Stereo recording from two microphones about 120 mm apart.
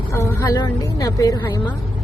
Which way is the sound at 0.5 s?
30° left (ahead or behind).